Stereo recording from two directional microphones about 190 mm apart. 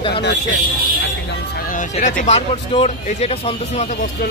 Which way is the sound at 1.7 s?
40° left (ahead or behind).